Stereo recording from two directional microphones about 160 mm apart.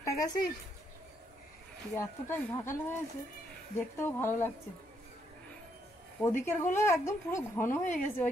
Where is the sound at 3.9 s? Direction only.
15° left (ahead or behind).